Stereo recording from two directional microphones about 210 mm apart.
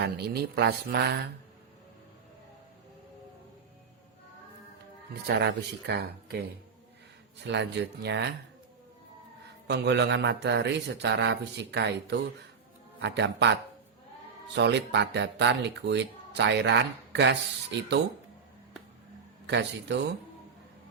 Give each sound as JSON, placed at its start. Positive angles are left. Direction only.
{"t": 0.0, "sound": "speech", "side_deg": -50}
{"t": 5.2, "sound": "speech", "side_deg": -50}
{"t": 7.4, "sound": "speech", "side_deg": -55}
{"t": 9.6, "sound": "speech", "side_deg": -55}
{"t": 19.5, "sound": "speech", "side_deg": -55}